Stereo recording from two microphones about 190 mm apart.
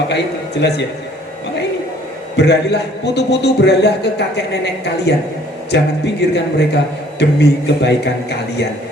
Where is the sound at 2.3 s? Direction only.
60° left (ahead or behind).